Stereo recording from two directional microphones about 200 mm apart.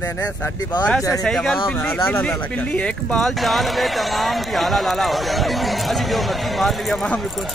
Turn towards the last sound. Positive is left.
turn(degrees=0)  # may be behind; listen again after turning